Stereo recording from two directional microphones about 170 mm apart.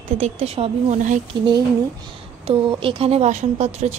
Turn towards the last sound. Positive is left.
turn(degrees=-40)  # may be behind; listen again after turning